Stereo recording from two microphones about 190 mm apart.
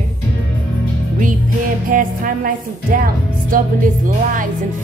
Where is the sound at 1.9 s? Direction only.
45° right (ahead or behind).